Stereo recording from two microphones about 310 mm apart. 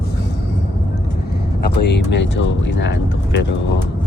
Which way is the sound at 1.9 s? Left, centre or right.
Left.